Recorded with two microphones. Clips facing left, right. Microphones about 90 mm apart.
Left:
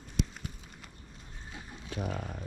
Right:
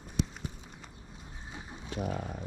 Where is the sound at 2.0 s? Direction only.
15° right (ahead or behind).